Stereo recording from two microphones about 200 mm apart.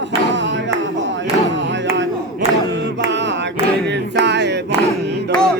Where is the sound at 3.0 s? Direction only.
60° right (ahead or behind).